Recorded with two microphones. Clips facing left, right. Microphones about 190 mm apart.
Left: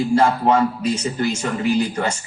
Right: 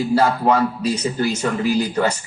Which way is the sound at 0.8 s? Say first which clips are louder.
Right 1 dB; 35° right (ahead or behind).